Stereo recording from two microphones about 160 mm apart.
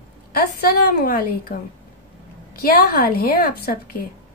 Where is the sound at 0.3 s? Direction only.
70° left (ahead or behind).